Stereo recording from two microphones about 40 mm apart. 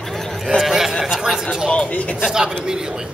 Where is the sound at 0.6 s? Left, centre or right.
Centre.